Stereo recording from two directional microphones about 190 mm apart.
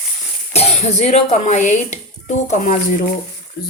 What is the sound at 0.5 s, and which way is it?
Speech, 35° left (ahead or behind).